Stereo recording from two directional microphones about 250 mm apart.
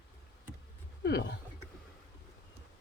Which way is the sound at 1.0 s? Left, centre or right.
Left.